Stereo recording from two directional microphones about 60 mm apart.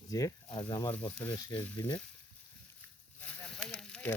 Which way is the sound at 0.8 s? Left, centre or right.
Left.